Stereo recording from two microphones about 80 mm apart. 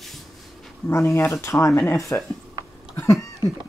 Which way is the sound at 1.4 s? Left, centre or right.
Left.